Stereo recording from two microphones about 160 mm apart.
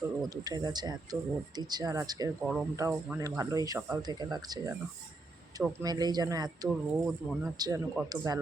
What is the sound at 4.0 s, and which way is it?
Speech, 25° right (ahead or behind).